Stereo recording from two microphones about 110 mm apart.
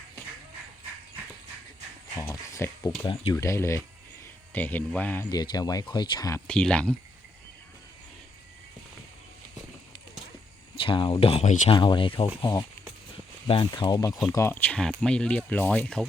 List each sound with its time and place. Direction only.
2.1 s speech: 30° left (ahead or behind)
5.3 s speech: 40° left (ahead or behind)
6.5 s speech: 10° left (ahead or behind)
10.8 s speech: 50° left (ahead or behind); by 11.7 s 80° left
11.7 s speech: 50° left (ahead or behind)
12.4 s speech: 35° left (ahead or behind)
14.5 s speech: 15° left (ahead or behind)